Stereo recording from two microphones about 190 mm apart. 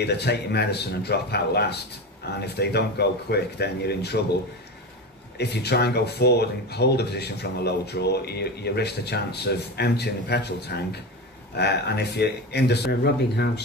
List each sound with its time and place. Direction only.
0.0 s speech: 60° left (ahead or behind)
5.4 s speech: 60° left (ahead or behind)